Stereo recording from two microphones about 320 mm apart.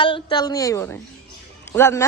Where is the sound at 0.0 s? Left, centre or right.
Centre.